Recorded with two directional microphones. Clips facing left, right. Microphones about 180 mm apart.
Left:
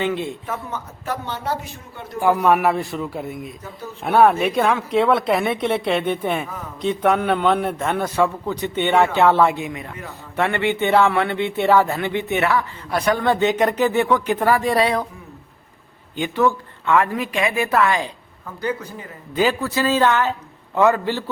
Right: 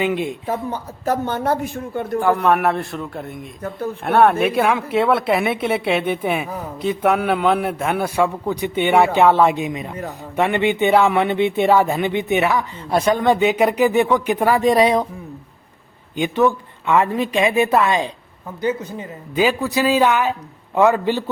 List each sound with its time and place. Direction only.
0.0 s speech: 15° right (ahead or behind)
0.4 s speech: 30° right (ahead or behind); by 2.1 s 55° right (ahead or behind)
2.1 s a man's voice: 10° left (ahead or behind)
3.6 s speech: 55° right (ahead or behind)
4.0 s speech: centre (ahead or behind); by 15.0 s 20° right (ahead or behind)
16.1 s a woman's voice: 15° right (ahead or behind)